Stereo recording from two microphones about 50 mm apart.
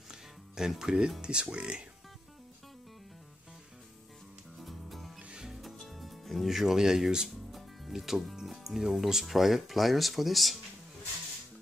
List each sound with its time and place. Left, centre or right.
0.1 s music: centre
1.2 s speech: centre
4.6 s music: centre
5.3 s music: centre
5.6 s speech: centre